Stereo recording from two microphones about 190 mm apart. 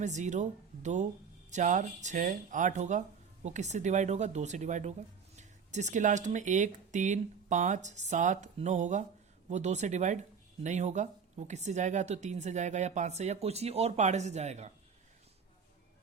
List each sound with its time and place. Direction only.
0.0 s speech: 40° right (ahead or behind)